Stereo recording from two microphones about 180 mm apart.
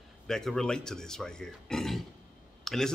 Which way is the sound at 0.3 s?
Centre (ahead or behind).